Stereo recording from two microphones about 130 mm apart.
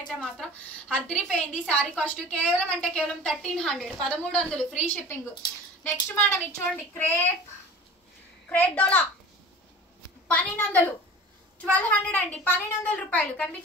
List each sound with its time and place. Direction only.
0.1 s a woman's voice: 5° left (ahead or behind)
8.5 s a woman's voice: 10° left (ahead or behind)
10.2 s a woman's voice: 10° left (ahead or behind)